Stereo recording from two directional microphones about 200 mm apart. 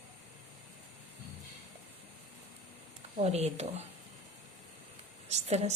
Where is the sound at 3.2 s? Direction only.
35° right (ahead or behind).